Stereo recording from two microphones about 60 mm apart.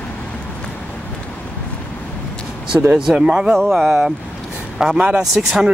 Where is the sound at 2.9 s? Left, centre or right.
Centre.